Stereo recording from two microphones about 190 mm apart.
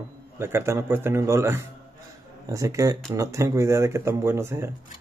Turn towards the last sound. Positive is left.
turn(degrees=-15)  # may be behind; listen again after turning